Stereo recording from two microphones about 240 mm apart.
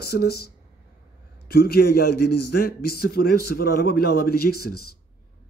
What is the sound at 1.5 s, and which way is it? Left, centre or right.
Speech, left.